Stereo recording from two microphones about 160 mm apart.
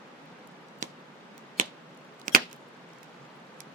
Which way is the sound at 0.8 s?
50° right (ahead or behind).